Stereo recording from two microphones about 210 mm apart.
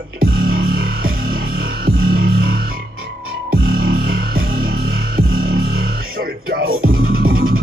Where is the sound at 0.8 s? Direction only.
45° right (ahead or behind).